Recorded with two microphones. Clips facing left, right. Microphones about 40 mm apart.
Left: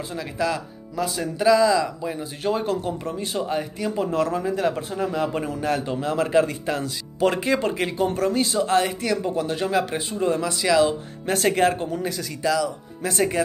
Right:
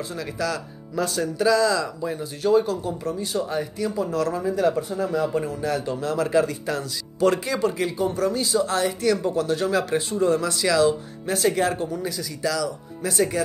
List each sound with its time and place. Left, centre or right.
0.1 s speech: left
0.9 s speech: centre
2.4 s a man's voice: left
3.9 s a man's voice: left
9.0 s speech: left
11.2 s speech: left
12.4 s speech: left
13.1 s a man's voice: left